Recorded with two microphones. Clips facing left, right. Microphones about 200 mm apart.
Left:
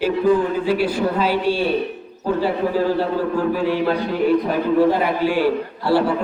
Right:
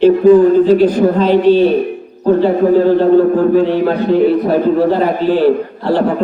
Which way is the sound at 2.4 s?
40° right (ahead or behind).